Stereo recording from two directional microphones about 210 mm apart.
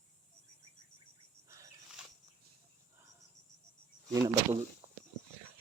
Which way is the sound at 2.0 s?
5° right (ahead or behind).